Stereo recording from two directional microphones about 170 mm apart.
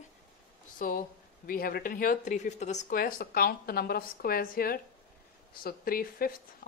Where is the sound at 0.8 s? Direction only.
55° left (ahead or behind).